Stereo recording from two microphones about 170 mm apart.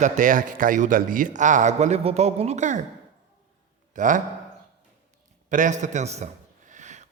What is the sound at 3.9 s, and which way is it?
Speech, 50° right (ahead or behind).